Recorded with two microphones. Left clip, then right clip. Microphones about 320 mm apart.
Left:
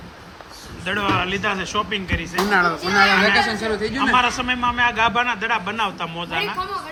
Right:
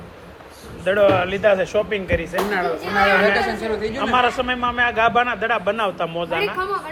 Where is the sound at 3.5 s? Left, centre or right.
Centre.